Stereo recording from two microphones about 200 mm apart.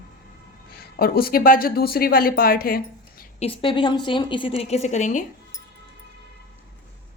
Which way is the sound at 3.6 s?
25° left (ahead or behind).